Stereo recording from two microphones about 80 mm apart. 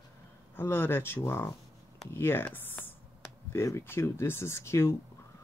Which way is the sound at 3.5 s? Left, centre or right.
Left.